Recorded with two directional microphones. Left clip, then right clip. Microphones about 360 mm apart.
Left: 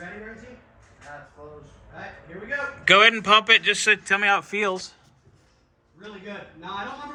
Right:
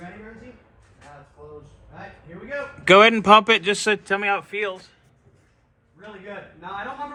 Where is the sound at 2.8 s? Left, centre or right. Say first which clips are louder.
Right 3 dB; centre.